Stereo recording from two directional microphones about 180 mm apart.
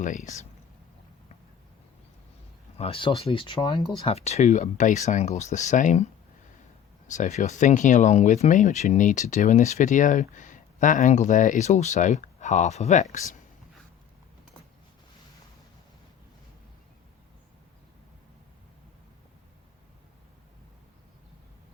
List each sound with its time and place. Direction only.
0.0 s speech: 45° left (ahead or behind)
2.7 s speech: 30° left (ahead or behind)
7.1 s speech: 40° left (ahead or behind)